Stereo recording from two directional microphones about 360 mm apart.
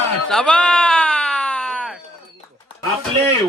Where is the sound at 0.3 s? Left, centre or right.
Centre.